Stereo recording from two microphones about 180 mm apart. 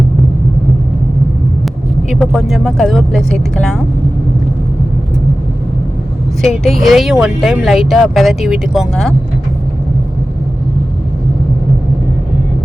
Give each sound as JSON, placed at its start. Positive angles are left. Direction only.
{"t": 2.0, "sound": "speech", "side_deg": 0}
{"t": 6.4, "sound": "speech", "side_deg": 0}